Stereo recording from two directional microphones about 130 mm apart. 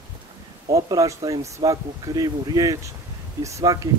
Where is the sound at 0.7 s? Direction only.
25° right (ahead or behind).